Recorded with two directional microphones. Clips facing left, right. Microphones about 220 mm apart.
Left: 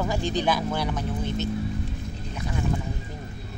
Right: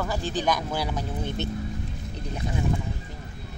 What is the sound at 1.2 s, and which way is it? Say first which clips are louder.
Speech: left 2 dB; 60° right (ahead or behind).